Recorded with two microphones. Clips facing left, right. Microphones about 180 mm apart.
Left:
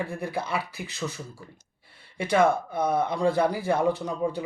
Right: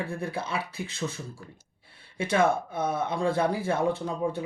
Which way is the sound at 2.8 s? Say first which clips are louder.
Left 4 dB; 55° left (ahead or behind).